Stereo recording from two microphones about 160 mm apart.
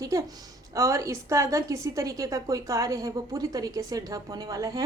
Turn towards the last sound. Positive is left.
turn(degrees=-20)  # may be behind; listen again after turning